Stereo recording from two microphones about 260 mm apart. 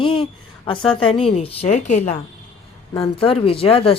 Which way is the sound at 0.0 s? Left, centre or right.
Centre.